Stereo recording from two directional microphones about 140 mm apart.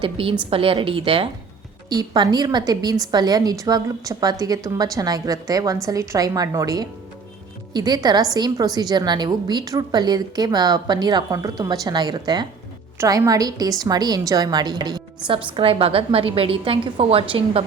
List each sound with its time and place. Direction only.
0.0 s a woman's voice: 40° right (ahead or behind)
1.9 s a woman's voice: 30° right (ahead or behind)